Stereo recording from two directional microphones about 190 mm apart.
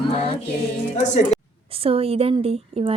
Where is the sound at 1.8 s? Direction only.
30° right (ahead or behind).